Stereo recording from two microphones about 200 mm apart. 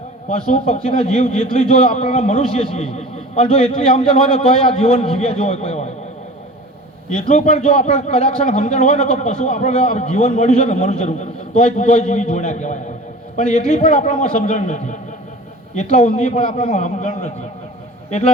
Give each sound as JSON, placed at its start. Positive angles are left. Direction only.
{"t": 0.4, "sound": "a man's voice", "side_deg": 30}
{"t": 7.1, "sound": "a man's voice", "side_deg": 35}